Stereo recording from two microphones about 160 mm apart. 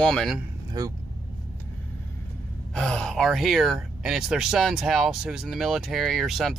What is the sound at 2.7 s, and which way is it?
Speech, 5° left (ahead or behind).